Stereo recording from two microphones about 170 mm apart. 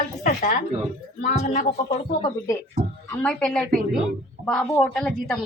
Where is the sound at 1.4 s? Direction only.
35° left (ahead or behind).